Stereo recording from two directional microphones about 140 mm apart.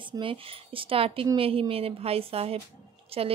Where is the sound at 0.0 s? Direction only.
35° right (ahead or behind).